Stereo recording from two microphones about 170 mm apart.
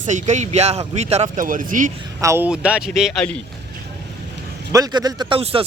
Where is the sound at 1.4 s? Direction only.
50° right (ahead or behind).